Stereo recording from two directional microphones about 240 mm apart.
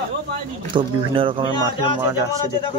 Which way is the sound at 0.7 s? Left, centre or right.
Right.